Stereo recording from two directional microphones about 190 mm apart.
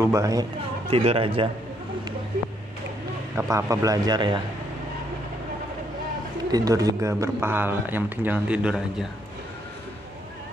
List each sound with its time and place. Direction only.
0.0 s speech: 15° right (ahead or behind)
0.8 s speech: 30° right (ahead or behind)
3.3 s speech: 15° right (ahead or behind)
6.5 s speech: 20° right (ahead or behind)